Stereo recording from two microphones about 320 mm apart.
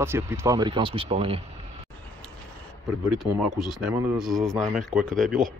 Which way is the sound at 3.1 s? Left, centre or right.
Centre.